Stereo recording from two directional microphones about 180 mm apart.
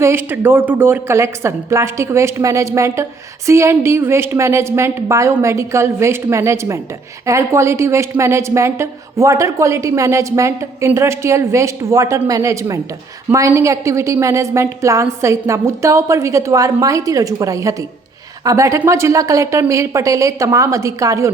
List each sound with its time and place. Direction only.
0.0 s a woman's voice: 15° right (ahead or behind)